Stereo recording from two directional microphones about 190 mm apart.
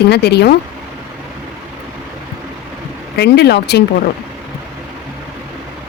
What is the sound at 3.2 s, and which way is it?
Speech, 60° left (ahead or behind).